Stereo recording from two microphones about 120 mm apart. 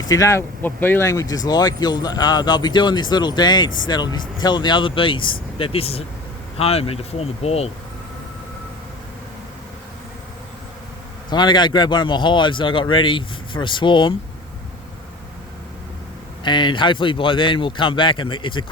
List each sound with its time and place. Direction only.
0.0 s speech: 30° left (ahead or behind); by 7.7 s 60° left (ahead or behind)
11.3 s speech: 40° left (ahead or behind)
16.4 s speech: 40° left (ahead or behind)